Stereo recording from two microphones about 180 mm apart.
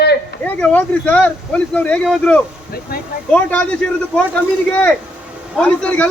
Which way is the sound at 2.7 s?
60° left (ahead or behind).